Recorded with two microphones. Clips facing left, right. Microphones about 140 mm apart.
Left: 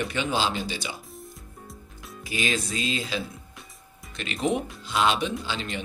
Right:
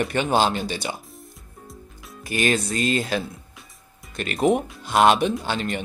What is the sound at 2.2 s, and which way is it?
Speech, 55° right (ahead or behind).